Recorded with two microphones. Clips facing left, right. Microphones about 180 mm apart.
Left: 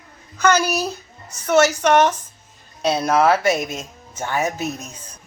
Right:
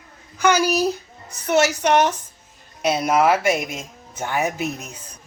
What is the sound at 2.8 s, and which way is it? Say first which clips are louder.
Speech: left 1 dB; 10° right (ahead or behind).